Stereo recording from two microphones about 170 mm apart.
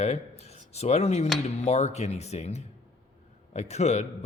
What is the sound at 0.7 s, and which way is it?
A man's voice, 40° left (ahead or behind).